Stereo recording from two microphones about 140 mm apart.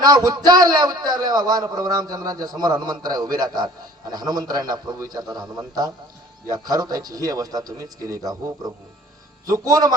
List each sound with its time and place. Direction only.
0.0 s a man's voice: 30° right (ahead or behind)